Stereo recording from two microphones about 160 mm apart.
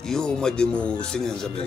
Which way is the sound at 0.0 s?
5° left (ahead or behind).